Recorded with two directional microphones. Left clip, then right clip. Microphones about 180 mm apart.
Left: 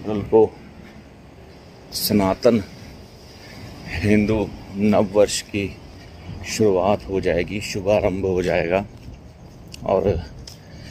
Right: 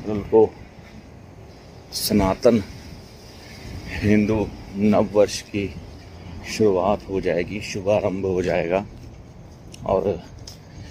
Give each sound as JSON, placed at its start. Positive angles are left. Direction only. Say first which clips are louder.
{"t": 0.0, "sound": "speech", "louder": "left 1 dB", "side_deg": 10}
{"t": 1.9, "sound": "speech", "louder": "left 1 dB", "side_deg": 0}
{"t": 3.9, "sound": "speech", "louder": "left 1 dB", "side_deg": 10}
{"t": 9.8, "sound": "speech", "louder": "left 2 dB", "side_deg": 10}